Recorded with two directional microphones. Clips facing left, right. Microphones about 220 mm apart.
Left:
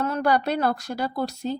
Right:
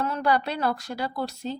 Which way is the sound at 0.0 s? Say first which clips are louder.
Left 2 dB; 45° left (ahead or behind).